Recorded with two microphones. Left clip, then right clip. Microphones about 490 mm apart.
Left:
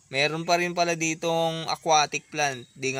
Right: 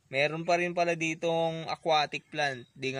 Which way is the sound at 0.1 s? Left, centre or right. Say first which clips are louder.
Left 4 dB; right.